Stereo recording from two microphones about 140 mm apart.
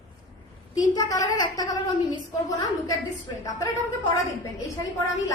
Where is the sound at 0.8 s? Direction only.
25° left (ahead or behind).